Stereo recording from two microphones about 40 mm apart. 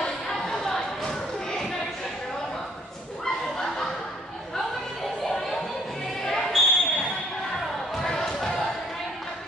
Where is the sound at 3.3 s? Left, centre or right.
Centre.